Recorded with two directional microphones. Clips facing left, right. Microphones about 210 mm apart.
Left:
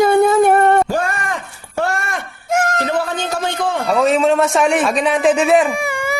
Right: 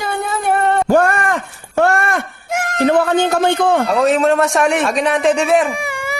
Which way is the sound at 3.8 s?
Centre (ahead or behind).